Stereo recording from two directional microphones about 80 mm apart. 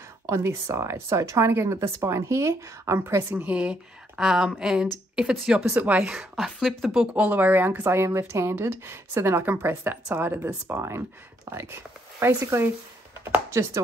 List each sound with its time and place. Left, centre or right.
0.3 s speech: right
3.3 s speech: centre
4.2 s speech: centre
5.8 s speech: centre
6.3 s speech: centre
7.2 s speech: right
13.2 s a sound: right